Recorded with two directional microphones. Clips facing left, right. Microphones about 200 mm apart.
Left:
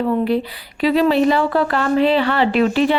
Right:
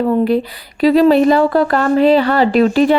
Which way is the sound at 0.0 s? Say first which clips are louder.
Right 4 dB; 45° right (ahead or behind).